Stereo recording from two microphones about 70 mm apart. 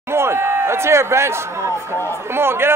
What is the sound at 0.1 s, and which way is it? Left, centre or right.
A man's voice, right.